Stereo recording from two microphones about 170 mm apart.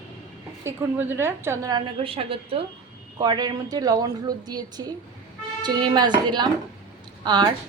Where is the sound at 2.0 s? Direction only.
35° right (ahead or behind).